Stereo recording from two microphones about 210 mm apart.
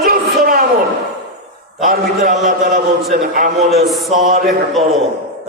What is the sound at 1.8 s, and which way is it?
A man's voice, 40° right (ahead or behind).